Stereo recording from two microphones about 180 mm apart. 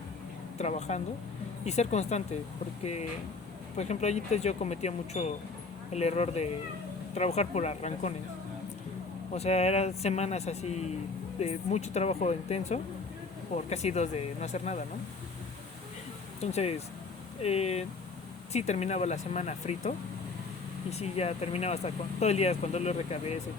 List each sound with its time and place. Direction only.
0.6 s speech: 40° left (ahead or behind)
9.3 s speech: 35° left (ahead or behind)
16.4 s speech: 35° left (ahead or behind)
20.9 s speech: 35° left (ahead or behind)